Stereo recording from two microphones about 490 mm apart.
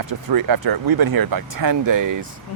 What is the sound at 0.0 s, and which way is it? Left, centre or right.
Speech, right.